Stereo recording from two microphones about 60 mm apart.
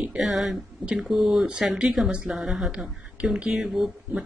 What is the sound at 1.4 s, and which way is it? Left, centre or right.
Speech, centre.